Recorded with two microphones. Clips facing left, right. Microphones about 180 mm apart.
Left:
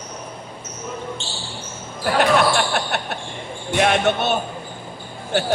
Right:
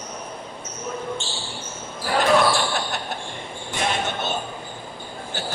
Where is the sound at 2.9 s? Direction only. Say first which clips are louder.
Left 5 dB; 65° left (ahead or behind).